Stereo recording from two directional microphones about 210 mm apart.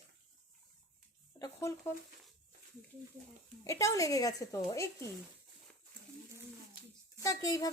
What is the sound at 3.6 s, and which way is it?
Speech, 15° left (ahead or behind).